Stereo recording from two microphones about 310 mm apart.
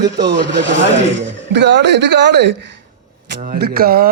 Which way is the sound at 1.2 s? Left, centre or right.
Right.